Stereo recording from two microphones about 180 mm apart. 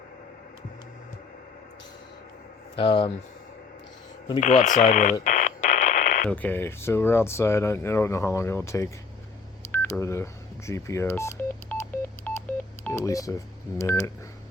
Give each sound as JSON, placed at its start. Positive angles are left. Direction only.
{"t": 2.7, "sound": "speech", "side_deg": 30}
{"t": 4.4, "sound": "speech", "side_deg": 45}
{"t": 5.2, "sound": "radio", "side_deg": 45}
{"t": 6.2, "sound": "speech", "side_deg": 10}